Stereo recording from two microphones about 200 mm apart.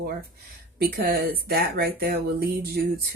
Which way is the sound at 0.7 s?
50° right (ahead or behind).